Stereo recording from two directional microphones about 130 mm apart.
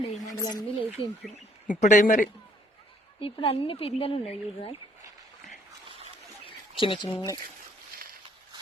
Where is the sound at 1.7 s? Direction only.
70° left (ahead or behind).